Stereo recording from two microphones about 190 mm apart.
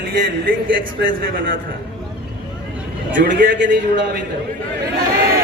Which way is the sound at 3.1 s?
70° right (ahead or behind).